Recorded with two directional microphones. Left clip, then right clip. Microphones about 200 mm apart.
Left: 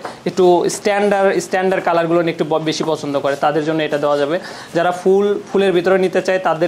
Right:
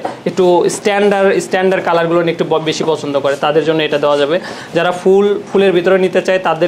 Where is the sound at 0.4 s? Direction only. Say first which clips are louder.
Right 2 dB; 40° left (ahead or behind).